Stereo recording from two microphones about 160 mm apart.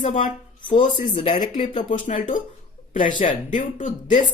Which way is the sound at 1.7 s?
55° left (ahead or behind).